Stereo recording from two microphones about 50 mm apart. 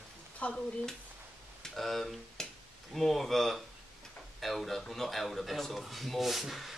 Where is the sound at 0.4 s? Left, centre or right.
Left.